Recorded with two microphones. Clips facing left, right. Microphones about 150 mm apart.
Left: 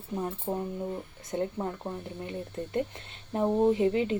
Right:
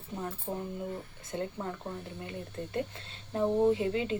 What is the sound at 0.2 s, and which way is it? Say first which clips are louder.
Speech: left 4 dB; 25° left (ahead or behind).